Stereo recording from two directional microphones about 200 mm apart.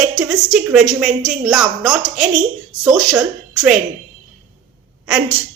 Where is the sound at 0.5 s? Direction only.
5° right (ahead or behind).